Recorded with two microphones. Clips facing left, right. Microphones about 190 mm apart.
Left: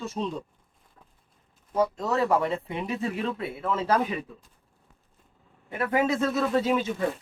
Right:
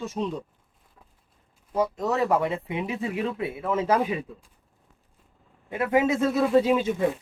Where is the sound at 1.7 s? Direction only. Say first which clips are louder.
Even; 15° right (ahead or behind).